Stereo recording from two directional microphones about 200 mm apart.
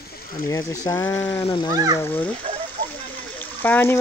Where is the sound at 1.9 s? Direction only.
10° left (ahead or behind).